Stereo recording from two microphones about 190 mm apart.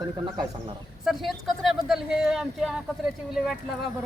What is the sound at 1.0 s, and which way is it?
Speech, centre (ahead or behind).